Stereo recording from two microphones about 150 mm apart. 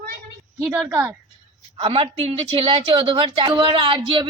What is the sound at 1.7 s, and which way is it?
A woman's voice, 40° right (ahead or behind).